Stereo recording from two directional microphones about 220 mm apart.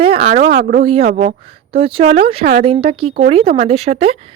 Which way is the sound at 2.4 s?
40° right (ahead or behind).